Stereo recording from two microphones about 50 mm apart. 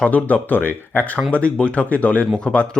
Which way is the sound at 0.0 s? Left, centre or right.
Left.